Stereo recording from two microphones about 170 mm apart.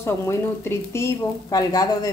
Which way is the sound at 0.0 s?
15° left (ahead or behind).